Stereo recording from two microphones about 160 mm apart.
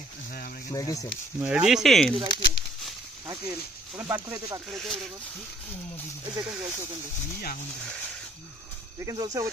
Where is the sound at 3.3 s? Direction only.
15° right (ahead or behind).